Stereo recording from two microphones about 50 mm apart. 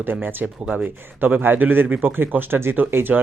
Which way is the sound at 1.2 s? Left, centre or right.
Right.